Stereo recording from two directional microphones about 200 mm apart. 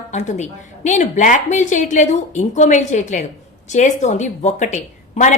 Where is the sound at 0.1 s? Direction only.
35° left (ahead or behind).